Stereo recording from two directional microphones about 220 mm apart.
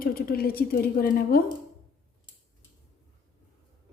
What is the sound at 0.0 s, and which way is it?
A woman's voice, 40° left (ahead or behind).